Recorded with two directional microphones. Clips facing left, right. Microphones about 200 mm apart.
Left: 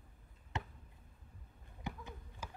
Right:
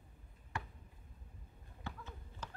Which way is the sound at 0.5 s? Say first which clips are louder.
Left 2 dB; 20° left (ahead or behind).